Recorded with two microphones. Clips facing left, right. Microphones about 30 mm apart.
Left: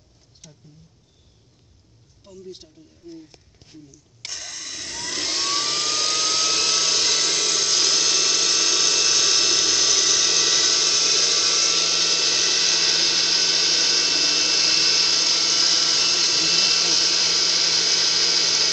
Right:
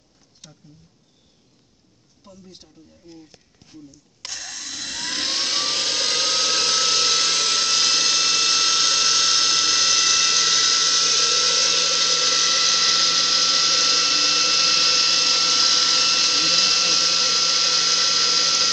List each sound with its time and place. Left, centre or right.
4.3 s vacuum cleaner: right
5.1 s vehicle: right
5.8 s vacuum cleaner: right
7.2 s a sound: right; by 18.7 s centre